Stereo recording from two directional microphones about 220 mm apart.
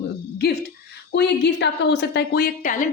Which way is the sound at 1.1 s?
50° left (ahead or behind).